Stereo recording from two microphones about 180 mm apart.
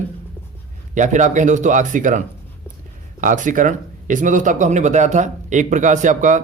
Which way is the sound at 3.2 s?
45° right (ahead or behind).